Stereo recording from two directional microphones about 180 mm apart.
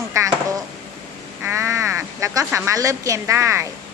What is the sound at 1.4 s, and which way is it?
Speech, 15° right (ahead or behind).